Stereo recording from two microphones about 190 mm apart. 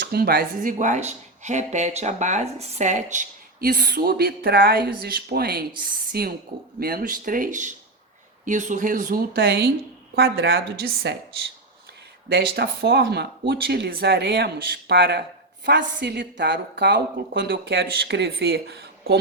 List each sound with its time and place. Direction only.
0.0 s speech: 55° right (ahead or behind); by 3.2 s 40° right (ahead or behind)
3.6 s a woman's voice: 55° right (ahead or behind)
12.3 s a woman's voice: 60° right (ahead or behind)